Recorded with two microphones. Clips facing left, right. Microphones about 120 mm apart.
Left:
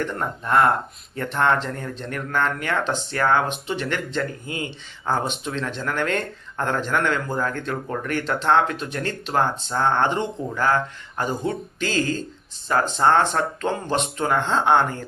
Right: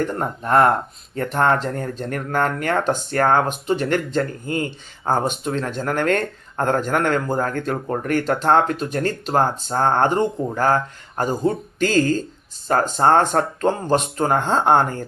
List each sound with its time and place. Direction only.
0.0 s speech: 40° right (ahead or behind)